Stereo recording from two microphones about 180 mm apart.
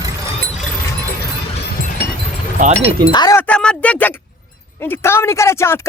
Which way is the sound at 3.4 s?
5° left (ahead or behind).